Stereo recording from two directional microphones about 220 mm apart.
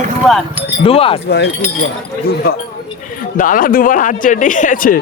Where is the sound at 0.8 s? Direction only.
25° left (ahead or behind).